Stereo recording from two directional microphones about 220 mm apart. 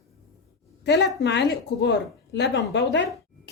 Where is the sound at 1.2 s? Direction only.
50° left (ahead or behind).